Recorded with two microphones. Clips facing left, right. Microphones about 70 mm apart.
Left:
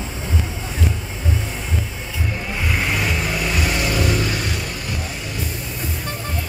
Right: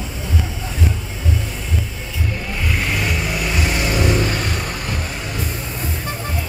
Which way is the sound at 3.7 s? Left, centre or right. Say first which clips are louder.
Right 3 dB; right.